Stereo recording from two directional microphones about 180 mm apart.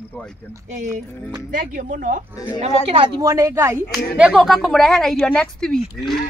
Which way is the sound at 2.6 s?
30° right (ahead or behind).